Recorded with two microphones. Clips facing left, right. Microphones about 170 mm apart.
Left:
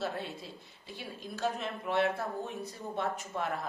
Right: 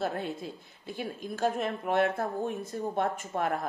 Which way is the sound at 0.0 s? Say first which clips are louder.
Right 4 dB; 50° right (ahead or behind).